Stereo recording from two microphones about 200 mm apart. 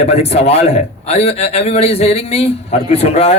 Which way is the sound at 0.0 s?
30° left (ahead or behind).